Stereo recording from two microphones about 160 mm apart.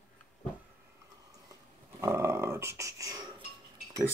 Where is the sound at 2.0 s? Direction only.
15° right (ahead or behind).